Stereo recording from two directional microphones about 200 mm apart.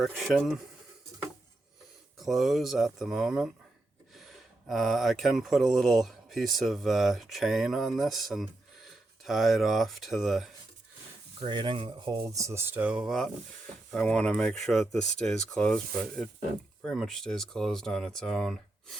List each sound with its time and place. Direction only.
0.0 s speech: centre (ahead or behind)
2.1 s speech: centre (ahead or behind)
11.3 s speech: 25° right (ahead or behind); by 18.9 s centre (ahead or behind)